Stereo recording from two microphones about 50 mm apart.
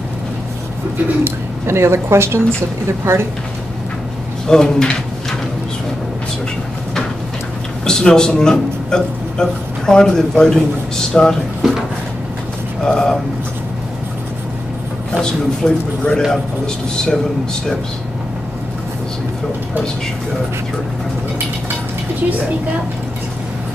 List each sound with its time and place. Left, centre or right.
1.2 s speech: right
4.5 s a man's voice: centre
7.8 s a man's voice: centre
12.8 s a man's voice: centre
15.2 s a man's voice: centre